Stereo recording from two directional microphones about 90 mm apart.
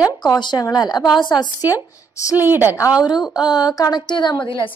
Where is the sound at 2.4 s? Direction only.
20° right (ahead or behind).